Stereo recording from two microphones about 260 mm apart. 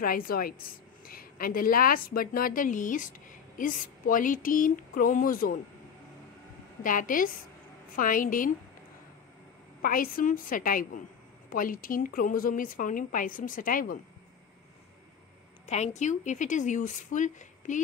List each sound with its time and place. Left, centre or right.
0.0 s a woman's voice: left
6.8 s a woman's voice: left
9.8 s a woman's voice: left
15.6 s a woman's voice: left